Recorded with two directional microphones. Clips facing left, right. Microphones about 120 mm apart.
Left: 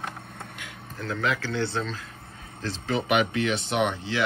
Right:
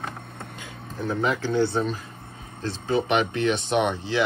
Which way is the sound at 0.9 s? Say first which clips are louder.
Right 3 dB; 15° right (ahead or behind).